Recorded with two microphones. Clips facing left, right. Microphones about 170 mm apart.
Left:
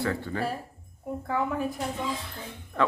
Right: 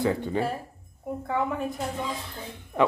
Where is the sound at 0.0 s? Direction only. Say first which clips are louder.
Right 4 dB; 20° right (ahead or behind).